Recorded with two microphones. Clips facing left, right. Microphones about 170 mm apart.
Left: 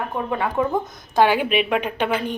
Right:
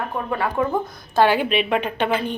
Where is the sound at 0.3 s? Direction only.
10° left (ahead or behind).